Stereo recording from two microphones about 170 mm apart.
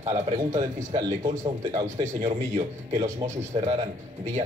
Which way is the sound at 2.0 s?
40° right (ahead or behind).